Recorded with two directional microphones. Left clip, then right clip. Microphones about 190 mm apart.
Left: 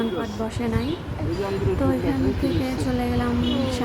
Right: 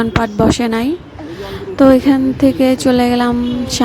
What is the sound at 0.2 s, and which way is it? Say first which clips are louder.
Speech: right 14 dB; 50° right (ahead or behind).